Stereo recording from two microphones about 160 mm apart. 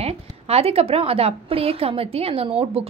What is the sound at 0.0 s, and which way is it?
A woman's voice, 40° right (ahead or behind).